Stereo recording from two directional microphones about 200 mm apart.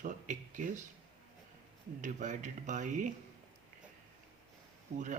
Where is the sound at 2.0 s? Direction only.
40° right (ahead or behind).